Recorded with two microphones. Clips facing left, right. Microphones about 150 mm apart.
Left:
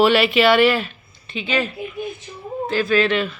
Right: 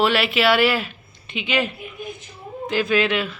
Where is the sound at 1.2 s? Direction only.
15° right (ahead or behind).